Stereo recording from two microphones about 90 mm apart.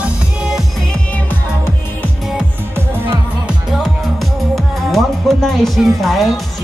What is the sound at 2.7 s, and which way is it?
Music, 25° right (ahead or behind).